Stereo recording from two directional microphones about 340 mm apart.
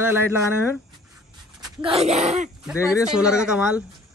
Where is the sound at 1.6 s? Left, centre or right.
Centre.